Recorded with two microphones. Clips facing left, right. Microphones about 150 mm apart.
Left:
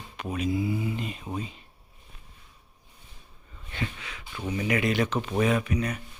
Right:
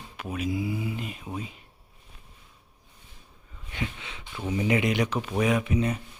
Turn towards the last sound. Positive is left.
turn(degrees=-25)  # may be behind; listen again after turning